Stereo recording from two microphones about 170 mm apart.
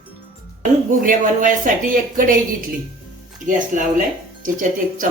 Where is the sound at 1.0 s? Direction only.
50° right (ahead or behind).